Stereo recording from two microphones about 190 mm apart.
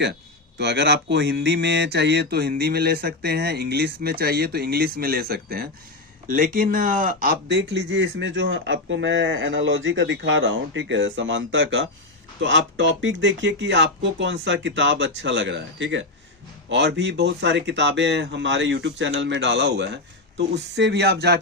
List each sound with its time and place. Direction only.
0.6 s speech: 65° right (ahead or behind)